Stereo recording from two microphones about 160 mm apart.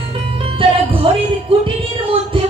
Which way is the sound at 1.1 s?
35° right (ahead or behind).